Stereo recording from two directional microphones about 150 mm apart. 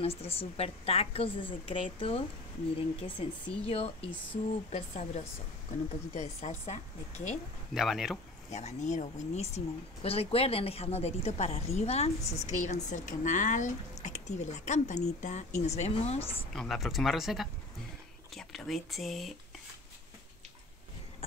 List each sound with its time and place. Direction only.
0.0 s a woman's voice: 40° left (ahead or behind)
7.7 s speech: 5° right (ahead or behind)
8.5 s a woman's voice: 50° left (ahead or behind)
16.5 s speech: centre (ahead or behind)